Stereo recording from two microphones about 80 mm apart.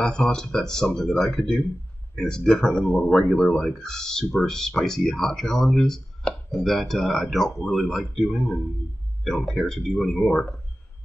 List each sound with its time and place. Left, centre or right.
0.0 s speech: centre